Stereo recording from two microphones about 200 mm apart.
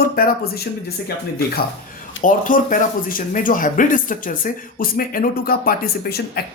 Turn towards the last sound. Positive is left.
turn(degrees=50)  # may be behind; listen again after turning